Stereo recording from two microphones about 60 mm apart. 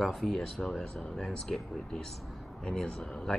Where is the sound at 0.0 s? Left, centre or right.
Centre.